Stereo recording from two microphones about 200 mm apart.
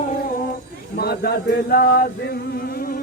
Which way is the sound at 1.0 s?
50° left (ahead or behind).